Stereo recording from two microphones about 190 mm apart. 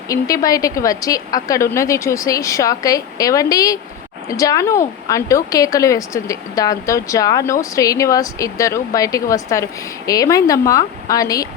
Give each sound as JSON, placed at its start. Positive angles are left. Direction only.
{"t": 0.1, "sound": "a woman's voice", "side_deg": 20}